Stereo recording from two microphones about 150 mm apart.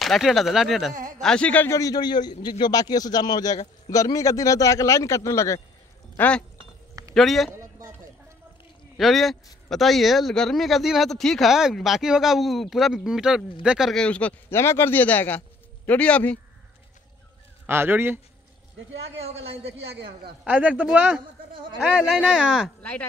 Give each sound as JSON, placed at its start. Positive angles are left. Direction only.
{"t": 0.0, "sound": "a man's voice", "side_deg": 0}
{"t": 1.8, "sound": "a man's voice", "side_deg": 25}
{"t": 6.1, "sound": "a man's voice", "side_deg": 10}
{"t": 8.9, "sound": "a man's voice", "side_deg": 0}
{"t": 17.6, "sound": "speech", "side_deg": -15}
{"t": 19.9, "sound": "a man's voice", "side_deg": -90}
{"t": 20.4, "sound": "a man's voice", "side_deg": -10}
{"t": 22.8, "sound": "speech", "side_deg": 10}